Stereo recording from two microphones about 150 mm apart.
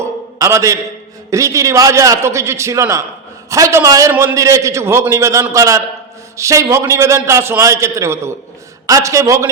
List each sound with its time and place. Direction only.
0.3 s a man's voice: 20° right (ahead or behind)